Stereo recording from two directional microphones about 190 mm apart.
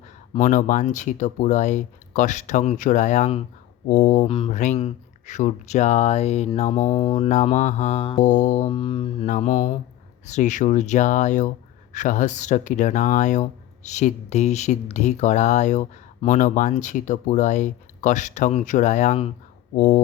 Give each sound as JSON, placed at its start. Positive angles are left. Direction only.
{"t": 0.3, "sound": "speech", "side_deg": 40}
{"t": 3.8, "sound": "speech", "side_deg": 45}
{"t": 4.3, "sound": "speech", "side_deg": 30}
{"t": 8.2, "sound": "speech", "side_deg": 40}
{"t": 8.7, "sound": "mantra", "side_deg": 30}
{"t": 9.2, "sound": "speech", "side_deg": 40}
{"t": 19.7, "sound": "speech", "side_deg": 45}